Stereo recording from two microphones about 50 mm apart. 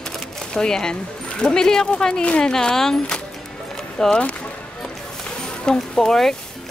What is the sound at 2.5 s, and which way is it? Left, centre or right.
Speech, centre.